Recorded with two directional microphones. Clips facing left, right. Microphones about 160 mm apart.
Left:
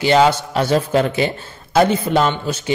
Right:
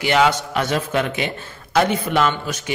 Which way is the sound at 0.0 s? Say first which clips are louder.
Left 4 dB; 30° left (ahead or behind).